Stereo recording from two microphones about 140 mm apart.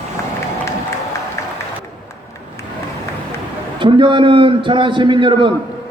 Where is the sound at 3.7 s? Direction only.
35° right (ahead or behind).